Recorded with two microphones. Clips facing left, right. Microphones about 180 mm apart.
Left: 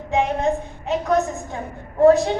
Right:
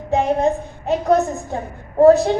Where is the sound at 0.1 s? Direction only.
35° right (ahead or behind).